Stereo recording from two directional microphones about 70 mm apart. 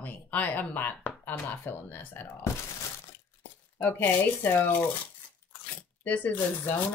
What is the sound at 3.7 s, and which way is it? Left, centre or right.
Speech, left.